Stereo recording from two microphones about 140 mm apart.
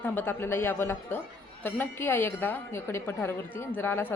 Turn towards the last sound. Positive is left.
turn(degrees=15)  # may be behind; listen again after turning